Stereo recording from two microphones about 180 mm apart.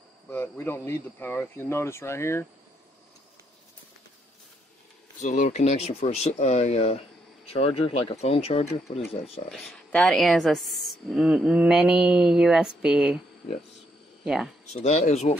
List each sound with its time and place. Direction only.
0.3 s speech: 10° left (ahead or behind)
5.2 s speech: 40° left (ahead or behind)
9.5 s speech: centre (ahead or behind)
14.2 s speech: centre (ahead or behind)
14.7 s speech: 40° left (ahead or behind)